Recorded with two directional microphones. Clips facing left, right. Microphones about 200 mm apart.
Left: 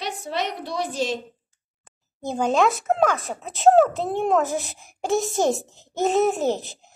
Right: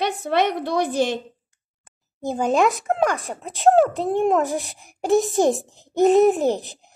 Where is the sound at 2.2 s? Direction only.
5° right (ahead or behind).